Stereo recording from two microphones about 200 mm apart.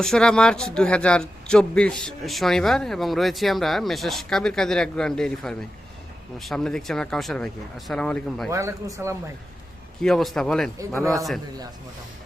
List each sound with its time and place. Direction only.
0.0 s a man's voice: 5° left (ahead or behind)
8.4 s speech: 15° right (ahead or behind)
10.0 s a man's voice: centre (ahead or behind)
11.0 s speech: 15° right (ahead or behind)